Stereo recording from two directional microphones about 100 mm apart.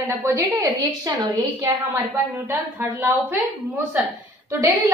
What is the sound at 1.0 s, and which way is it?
A woman's voice, 40° right (ahead or behind).